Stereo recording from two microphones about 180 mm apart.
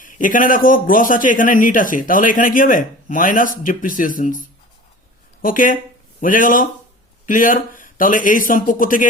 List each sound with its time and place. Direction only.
0.0 s a man's voice: 50° left (ahead or behind)